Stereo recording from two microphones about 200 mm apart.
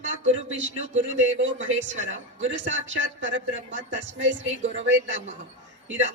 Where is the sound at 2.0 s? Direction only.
35° right (ahead or behind).